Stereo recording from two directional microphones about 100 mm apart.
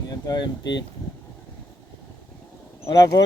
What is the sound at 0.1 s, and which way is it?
Speech, 45° left (ahead or behind).